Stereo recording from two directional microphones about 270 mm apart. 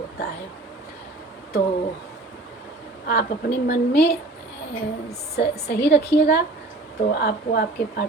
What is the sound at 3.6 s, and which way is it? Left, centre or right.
Speech, left.